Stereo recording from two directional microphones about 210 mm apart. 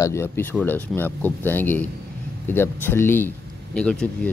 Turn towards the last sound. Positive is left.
turn(degrees=5)  # may be behind; listen again after turning